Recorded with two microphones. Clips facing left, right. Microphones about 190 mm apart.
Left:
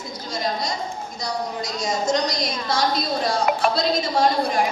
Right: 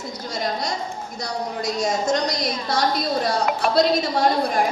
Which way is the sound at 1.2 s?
60° right (ahead or behind).